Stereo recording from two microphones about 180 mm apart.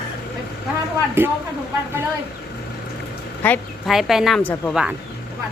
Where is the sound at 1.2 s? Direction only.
10° right (ahead or behind).